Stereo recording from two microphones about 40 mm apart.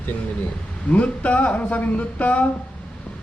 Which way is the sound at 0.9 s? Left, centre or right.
Left.